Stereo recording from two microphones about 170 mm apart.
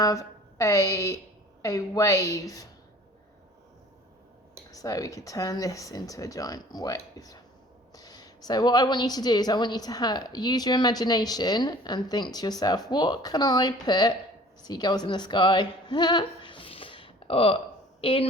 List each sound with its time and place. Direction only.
0.0 s a woman's voice: 20° left (ahead or behind)
4.7 s a woman's voice: 20° left (ahead or behind)